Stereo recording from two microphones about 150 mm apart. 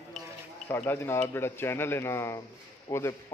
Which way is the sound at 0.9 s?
15° left (ahead or behind).